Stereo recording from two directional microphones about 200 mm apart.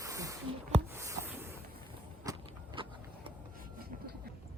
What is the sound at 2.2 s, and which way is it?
Vehicle, 20° right (ahead or behind).